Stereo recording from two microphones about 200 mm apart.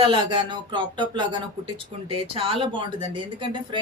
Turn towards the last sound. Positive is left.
turn(degrees=-25)  # may be behind; listen again after turning